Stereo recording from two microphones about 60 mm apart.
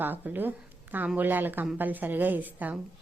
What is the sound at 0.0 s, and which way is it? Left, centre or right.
Speech, right.